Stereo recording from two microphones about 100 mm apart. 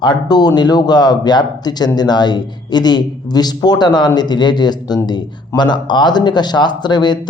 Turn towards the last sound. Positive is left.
turn(degrees=45)  # may be behind; listen again after turning